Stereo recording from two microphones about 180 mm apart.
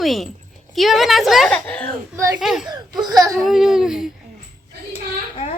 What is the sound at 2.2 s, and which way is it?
Speech, 20° right (ahead or behind).